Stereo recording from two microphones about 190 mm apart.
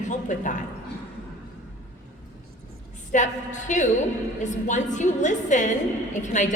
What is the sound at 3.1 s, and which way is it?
A woman's voice, 40° left (ahead or behind).